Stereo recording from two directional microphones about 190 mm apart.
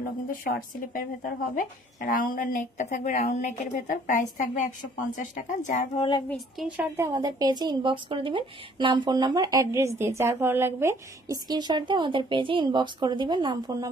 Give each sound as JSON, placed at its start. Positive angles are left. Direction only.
{"t": 0.3, "sound": "a woman's voice", "side_deg": 45}
{"t": 6.3, "sound": "a woman's voice", "side_deg": 0}
{"t": 7.0, "sound": "a woman's voice", "side_deg": -20}